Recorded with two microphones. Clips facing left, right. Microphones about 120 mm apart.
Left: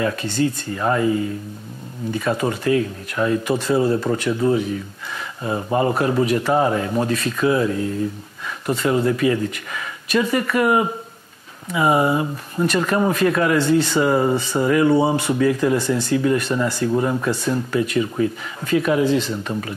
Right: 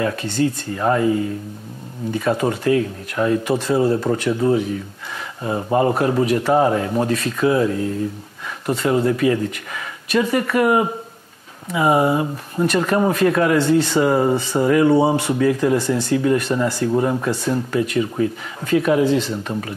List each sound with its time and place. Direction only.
0.0 s speech: 35° right (ahead or behind)